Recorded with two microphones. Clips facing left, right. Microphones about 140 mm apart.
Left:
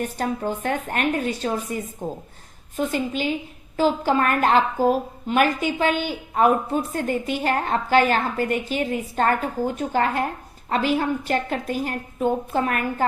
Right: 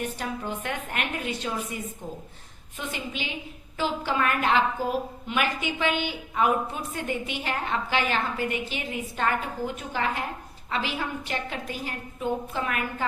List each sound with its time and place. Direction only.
0.0 s a woman's voice: 40° left (ahead or behind)